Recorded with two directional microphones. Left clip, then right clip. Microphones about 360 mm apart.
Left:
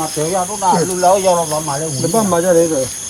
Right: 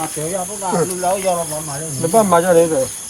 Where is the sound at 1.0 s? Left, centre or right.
Centre.